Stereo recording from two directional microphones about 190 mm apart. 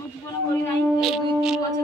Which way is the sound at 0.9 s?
Centre (ahead or behind).